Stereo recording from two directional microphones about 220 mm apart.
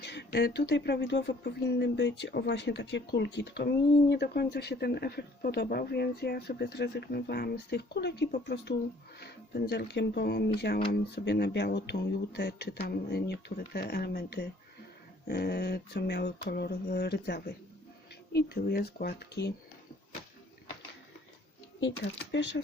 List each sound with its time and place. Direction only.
0.0 s speech: 50° left (ahead or behind)
22.0 s speech: 50° left (ahead or behind)